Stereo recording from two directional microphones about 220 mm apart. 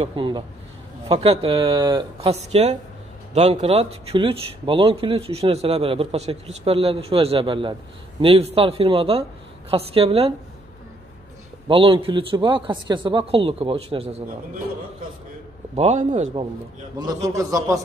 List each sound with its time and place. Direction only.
0.0 s speech: 20° right (ahead or behind)
11.6 s speech: 25° right (ahead or behind)
15.7 s a man's voice: 30° right (ahead or behind)
17.0 s a man's voice: 15° right (ahead or behind)